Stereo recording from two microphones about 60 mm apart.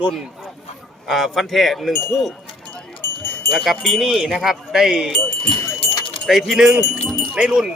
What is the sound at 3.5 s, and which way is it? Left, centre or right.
Speech, centre.